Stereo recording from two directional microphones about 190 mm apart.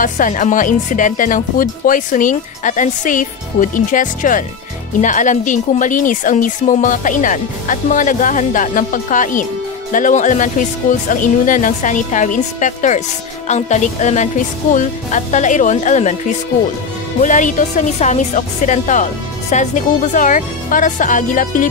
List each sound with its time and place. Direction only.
0.0 s a woman's voice: 45° left (ahead or behind)
17.2 s a woman's voice: 40° left (ahead or behind)